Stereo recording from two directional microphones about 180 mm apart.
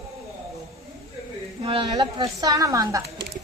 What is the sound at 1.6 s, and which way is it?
A woman's voice, 30° right (ahead or behind).